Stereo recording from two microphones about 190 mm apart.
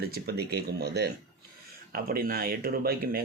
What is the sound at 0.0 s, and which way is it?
Speech, 55° right (ahead or behind).